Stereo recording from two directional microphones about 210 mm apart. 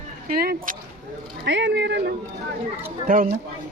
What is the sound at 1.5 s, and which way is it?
Speech, 55° right (ahead or behind).